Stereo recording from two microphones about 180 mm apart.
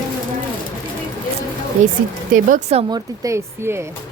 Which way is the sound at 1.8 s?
40° right (ahead or behind).